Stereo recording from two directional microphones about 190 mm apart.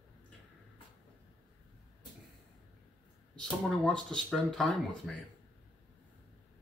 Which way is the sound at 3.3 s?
5° left (ahead or behind).